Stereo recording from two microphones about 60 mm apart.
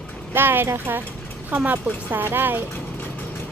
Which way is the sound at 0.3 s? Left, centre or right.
Right.